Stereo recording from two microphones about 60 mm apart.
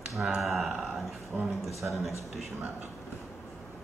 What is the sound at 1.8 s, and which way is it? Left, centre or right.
Speech, right.